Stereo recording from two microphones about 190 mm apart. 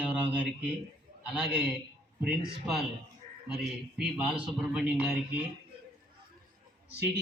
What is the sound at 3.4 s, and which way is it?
A man's voice, 5° right (ahead or behind).